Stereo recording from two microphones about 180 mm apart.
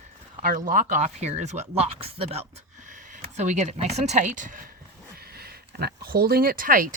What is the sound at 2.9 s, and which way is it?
Speech, 45° right (ahead or behind).